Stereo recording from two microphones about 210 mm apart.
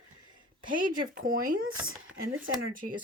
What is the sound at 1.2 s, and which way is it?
Speech, 40° right (ahead or behind).